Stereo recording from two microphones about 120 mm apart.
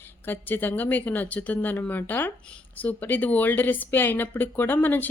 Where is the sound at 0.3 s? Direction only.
15° left (ahead or behind).